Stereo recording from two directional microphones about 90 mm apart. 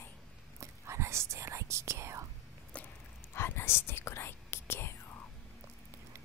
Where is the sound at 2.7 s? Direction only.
15° left (ahead or behind).